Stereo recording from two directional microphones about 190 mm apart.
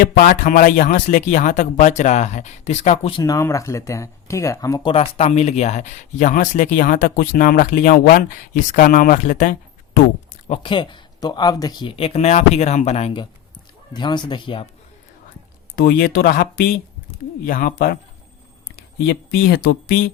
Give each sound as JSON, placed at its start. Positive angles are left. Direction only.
{"t": 0.0, "sound": "speech", "side_deg": 45}
{"t": 3.2, "sound": "speech", "side_deg": 15}
{"t": 10.5, "sound": "speech", "side_deg": 25}
{"t": 15.7, "sound": "speech", "side_deg": 50}